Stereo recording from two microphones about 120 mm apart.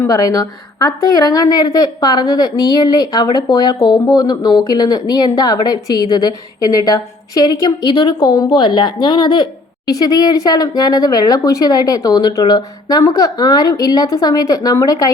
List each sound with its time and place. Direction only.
0.1 s a woman's voice: 30° left (ahead or behind)